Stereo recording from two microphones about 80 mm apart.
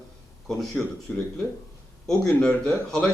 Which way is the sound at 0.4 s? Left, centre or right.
Centre.